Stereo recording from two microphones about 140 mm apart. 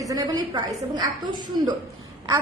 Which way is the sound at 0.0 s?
25° right (ahead or behind).